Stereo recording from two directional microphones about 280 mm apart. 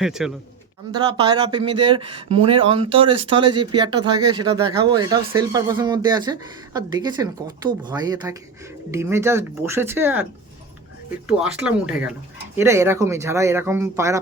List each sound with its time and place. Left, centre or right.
0.0 s speech: centre
0.9 s speech: centre
11.3 s speech: centre